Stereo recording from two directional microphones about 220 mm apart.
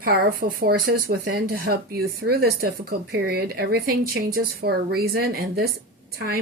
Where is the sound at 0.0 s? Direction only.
40° right (ahead or behind).